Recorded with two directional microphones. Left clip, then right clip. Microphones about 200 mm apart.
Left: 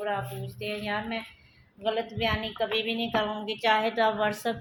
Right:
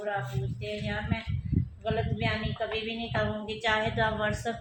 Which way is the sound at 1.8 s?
45° left (ahead or behind).